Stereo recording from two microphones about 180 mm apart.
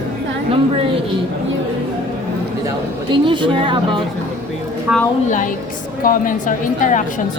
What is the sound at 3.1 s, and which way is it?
Speech, 25° right (ahead or behind).